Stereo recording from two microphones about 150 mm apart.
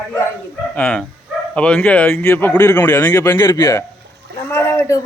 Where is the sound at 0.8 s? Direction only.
10° left (ahead or behind).